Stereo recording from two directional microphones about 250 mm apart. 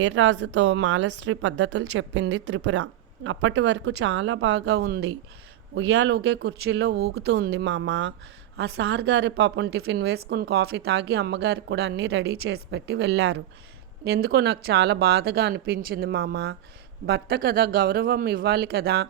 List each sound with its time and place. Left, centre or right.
0.0 s a woman's voice: right